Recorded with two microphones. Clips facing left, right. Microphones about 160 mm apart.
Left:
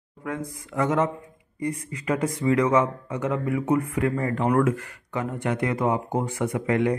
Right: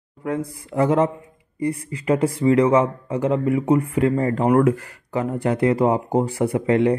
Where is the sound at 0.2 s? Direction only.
30° right (ahead or behind).